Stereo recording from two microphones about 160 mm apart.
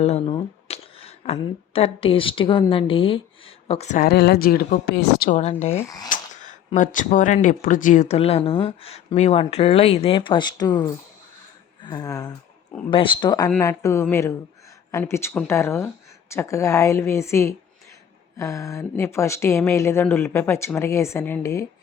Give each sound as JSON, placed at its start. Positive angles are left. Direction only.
{"t": 0.0, "sound": "a woman's voice", "side_deg": 40}
{"t": 4.0, "sound": "speech", "side_deg": 75}
{"t": 5.3, "sound": "speech", "side_deg": 45}
{"t": 5.7, "sound": "speech", "side_deg": 20}
{"t": 6.1, "sound": "a sound", "side_deg": 50}
{"t": 6.7, "sound": "speech", "side_deg": 55}